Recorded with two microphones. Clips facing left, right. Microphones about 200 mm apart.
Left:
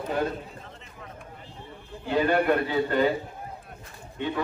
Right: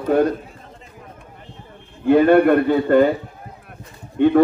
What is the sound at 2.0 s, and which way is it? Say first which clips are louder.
A man's voice: right 10 dB; 55° right (ahead or behind).